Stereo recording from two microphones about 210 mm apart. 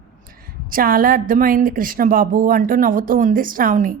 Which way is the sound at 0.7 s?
45° right (ahead or behind).